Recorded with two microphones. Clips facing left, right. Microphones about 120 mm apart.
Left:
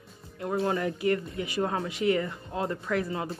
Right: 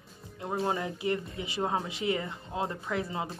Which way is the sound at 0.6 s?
20° right (ahead or behind).